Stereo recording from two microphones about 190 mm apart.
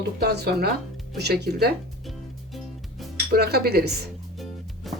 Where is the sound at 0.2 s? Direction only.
55° right (ahead or behind).